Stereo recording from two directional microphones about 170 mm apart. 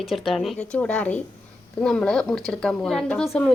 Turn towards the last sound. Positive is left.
turn(degrees=5)  # may be behind; listen again after turning